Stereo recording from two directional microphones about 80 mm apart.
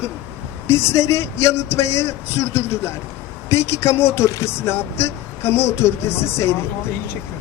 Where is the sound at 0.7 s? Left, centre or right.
Left.